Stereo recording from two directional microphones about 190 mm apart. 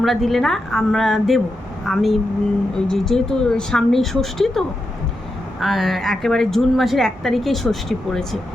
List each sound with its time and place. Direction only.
0.0 s a woman's voice: centre (ahead or behind)